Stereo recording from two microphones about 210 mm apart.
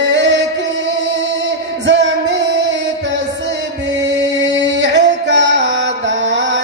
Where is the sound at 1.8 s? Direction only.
60° right (ahead or behind).